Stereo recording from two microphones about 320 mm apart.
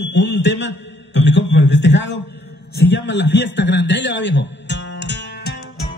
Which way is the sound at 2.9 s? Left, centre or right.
Left.